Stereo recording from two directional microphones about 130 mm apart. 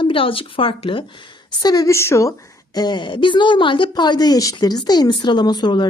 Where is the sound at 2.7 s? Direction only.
35° left (ahead or behind).